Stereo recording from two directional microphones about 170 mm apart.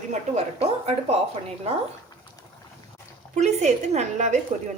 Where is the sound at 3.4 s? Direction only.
40° right (ahead or behind).